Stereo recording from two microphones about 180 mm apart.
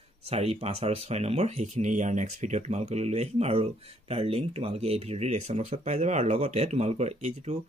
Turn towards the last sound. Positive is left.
turn(degrees=-40)  # may be behind; listen again after turning